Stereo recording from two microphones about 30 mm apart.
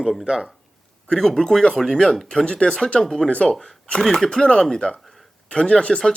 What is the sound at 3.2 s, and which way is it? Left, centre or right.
Speech, left.